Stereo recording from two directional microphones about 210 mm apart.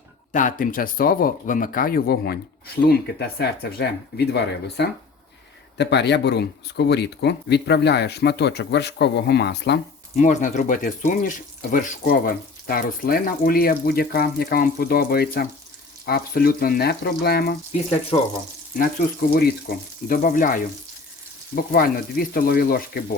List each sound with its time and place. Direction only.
0.3 s speech: 40° left (ahead or behind); by 9.8 s 55° left (ahead or behind)
10.2 s speech: 35° left (ahead or behind)
18.8 s speech: 45° left (ahead or behind)